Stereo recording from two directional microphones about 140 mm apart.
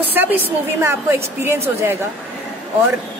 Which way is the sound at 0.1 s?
15° right (ahead or behind).